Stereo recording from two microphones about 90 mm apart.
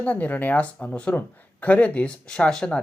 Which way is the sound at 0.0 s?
15° left (ahead or behind).